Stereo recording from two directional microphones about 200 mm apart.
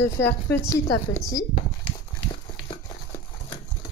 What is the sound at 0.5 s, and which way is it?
Speech, 15° left (ahead or behind).